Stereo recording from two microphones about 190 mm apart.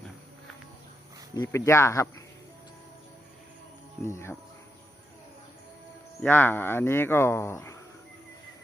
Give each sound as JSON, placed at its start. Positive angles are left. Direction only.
{"t": 1.3, "sound": "speech", "side_deg": 15}
{"t": 4.0, "sound": "speech", "side_deg": 15}
{"t": 6.2, "sound": "speech", "side_deg": 10}